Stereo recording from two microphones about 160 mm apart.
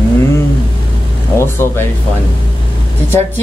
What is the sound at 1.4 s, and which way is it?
Speech, 15° left (ahead or behind).